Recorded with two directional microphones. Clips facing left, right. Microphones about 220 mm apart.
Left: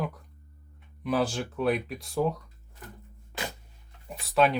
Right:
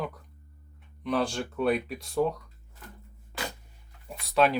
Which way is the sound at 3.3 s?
20° left (ahead or behind).